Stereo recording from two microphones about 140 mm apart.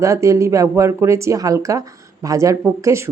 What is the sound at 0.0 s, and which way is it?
Speech, 20° right (ahead or behind).